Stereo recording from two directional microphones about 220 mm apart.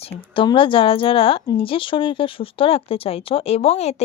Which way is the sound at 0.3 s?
25° left (ahead or behind).